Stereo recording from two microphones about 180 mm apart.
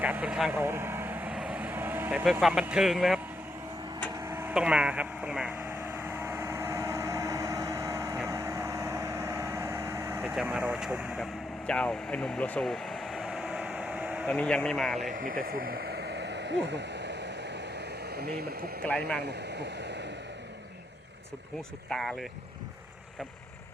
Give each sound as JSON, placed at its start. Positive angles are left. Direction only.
{"t": 0.0, "sound": "speech", "side_deg": -10}
{"t": 0.5, "sound": "vehicle", "side_deg": -15}
{"t": 4.2, "sound": "vehicle", "side_deg": -15}
{"t": 14.3, "sound": "speech", "side_deg": 5}
{"t": 15.1, "sound": "a sound", "side_deg": -50}
{"t": 18.9, "sound": "speech", "side_deg": 5}
{"t": 19.2, "sound": "speech", "side_deg": -70}
{"t": 21.8, "sound": "speech", "side_deg": 0}